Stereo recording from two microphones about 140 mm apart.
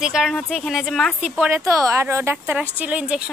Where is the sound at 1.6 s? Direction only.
20° right (ahead or behind).